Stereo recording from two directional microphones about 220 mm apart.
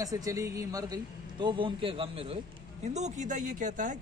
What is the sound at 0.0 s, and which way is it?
A man's voice, 15° right (ahead or behind).